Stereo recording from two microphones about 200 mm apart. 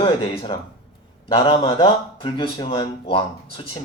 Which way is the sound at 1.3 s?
25° left (ahead or behind).